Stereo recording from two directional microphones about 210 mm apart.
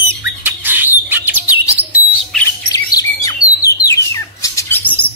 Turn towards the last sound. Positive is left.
turn(degrees=5)  # may be behind; listen again after turning